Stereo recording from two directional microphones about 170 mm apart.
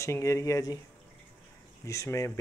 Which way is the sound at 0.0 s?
15° left (ahead or behind).